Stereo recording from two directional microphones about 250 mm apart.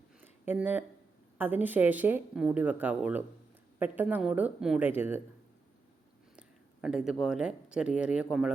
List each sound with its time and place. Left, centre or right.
0.2 s a sound: centre
1.4 s speech: centre
6.8 s speech: centre